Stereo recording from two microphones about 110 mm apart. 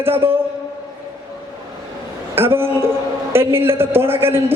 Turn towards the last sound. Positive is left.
turn(degrees=-20)  # may be behind; listen again after turning